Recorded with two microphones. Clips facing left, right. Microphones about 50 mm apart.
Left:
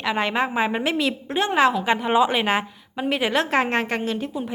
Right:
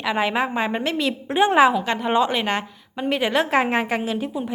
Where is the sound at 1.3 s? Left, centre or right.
Centre.